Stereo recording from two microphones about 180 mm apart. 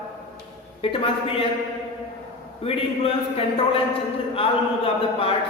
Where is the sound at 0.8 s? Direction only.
30° left (ahead or behind).